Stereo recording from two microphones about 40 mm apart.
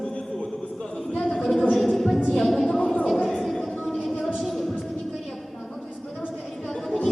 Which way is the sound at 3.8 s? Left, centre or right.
Centre.